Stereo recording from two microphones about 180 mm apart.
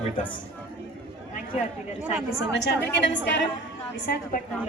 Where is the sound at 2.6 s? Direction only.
80° left.